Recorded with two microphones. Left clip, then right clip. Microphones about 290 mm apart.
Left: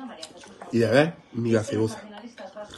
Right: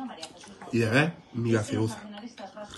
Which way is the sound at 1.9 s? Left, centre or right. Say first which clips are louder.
Left 2 dB; centre.